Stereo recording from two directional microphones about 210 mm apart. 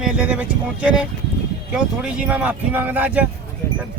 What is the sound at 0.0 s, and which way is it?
Speech, 5° right (ahead or behind).